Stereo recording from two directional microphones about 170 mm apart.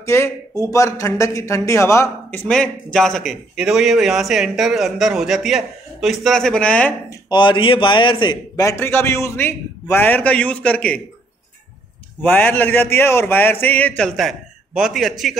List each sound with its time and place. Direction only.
0.0 s a man's voice: 15° left (ahead or behind)
2.4 s a man's voice: 5° left (ahead or behind)
7.1 s a man's voice: 25° left (ahead or behind); by 11.0 s 5° left (ahead or behind)
12.2 s a man's voice: 10° left (ahead or behind)